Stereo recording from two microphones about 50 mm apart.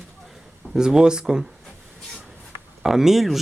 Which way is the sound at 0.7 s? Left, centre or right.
Centre.